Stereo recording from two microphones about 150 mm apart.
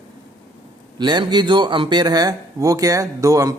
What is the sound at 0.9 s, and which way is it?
Speech, 30° right (ahead or behind).